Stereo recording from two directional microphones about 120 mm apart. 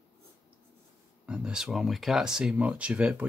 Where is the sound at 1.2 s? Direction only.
10° right (ahead or behind).